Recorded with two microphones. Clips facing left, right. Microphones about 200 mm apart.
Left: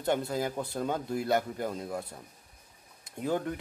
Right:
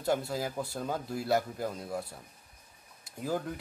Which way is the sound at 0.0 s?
Centre (ahead or behind).